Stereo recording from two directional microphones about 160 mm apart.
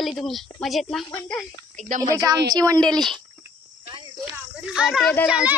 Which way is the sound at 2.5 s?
25° right (ahead or behind).